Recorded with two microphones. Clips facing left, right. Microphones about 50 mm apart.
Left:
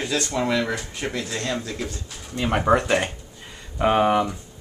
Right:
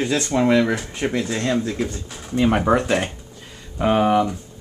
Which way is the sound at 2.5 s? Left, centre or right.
Centre.